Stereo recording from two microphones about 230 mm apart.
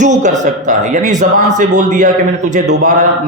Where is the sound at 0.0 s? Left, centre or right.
Right.